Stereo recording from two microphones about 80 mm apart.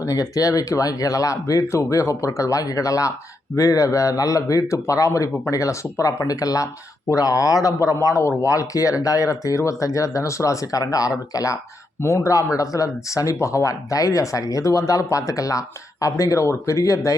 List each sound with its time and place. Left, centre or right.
0.0 s speech: left
12.0 s a man's voice: left